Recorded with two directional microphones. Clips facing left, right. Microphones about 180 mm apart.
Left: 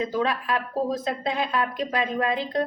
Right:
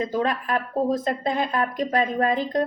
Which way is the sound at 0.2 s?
45° right (ahead or behind).